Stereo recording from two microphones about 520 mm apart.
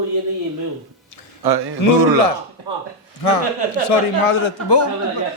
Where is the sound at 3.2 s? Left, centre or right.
Left.